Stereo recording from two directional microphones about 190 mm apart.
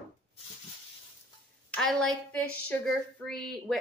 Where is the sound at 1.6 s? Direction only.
5° left (ahead or behind).